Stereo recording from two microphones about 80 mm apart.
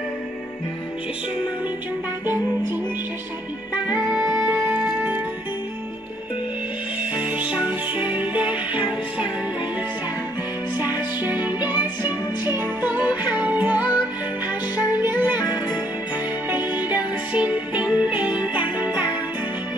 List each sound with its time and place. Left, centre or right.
3.7 s music: centre
7.0 s music: centre
10.8 s music: right